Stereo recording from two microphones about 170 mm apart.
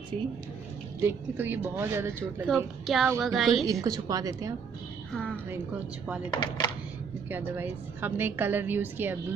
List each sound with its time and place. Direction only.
1.0 s a woman's voice: 10° right (ahead or behind)
2.4 s a woman's voice: centre (ahead or behind)
3.8 s a woman's voice: 20° right (ahead or behind)
5.1 s a sound: 10° left (ahead or behind)
6.3 s speech: 25° left (ahead or behind)
7.2 s a woman's voice: 10° right (ahead or behind)